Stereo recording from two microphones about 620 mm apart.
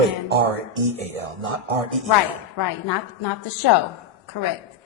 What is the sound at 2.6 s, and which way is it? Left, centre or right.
A woman's voice, left.